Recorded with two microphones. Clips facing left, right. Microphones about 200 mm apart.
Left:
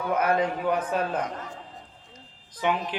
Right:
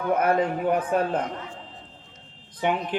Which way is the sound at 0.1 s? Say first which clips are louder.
Right 2 dB; 55° right (ahead or behind).